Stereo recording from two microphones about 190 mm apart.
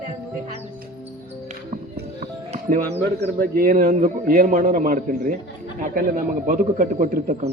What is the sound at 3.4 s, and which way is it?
A man's voice, 50° right (ahead or behind).